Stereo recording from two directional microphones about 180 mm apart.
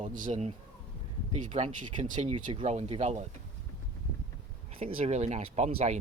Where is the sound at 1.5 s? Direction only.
35° right (ahead or behind).